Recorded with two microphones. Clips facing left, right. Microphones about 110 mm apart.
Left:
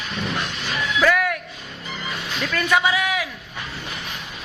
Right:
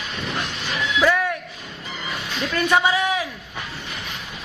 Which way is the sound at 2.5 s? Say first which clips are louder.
Right 1 dB; 25° right (ahead or behind).